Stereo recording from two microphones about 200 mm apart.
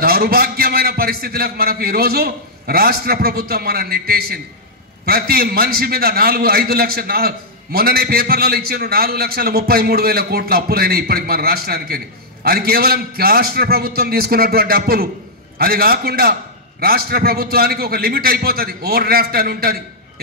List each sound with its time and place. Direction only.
0.0 s a man's voice: 50° right (ahead or behind)